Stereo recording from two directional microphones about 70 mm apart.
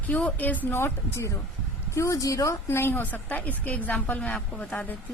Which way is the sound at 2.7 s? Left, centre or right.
Left.